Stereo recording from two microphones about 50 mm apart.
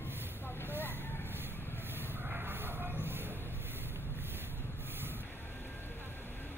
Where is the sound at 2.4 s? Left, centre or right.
Right.